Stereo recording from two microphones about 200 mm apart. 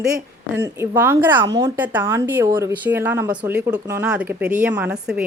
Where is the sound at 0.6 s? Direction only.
10° right (ahead or behind).